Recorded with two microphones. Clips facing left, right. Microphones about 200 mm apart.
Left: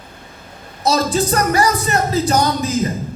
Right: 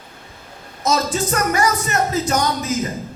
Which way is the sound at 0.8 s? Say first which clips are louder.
Left 3 dB; 35° left (ahead or behind).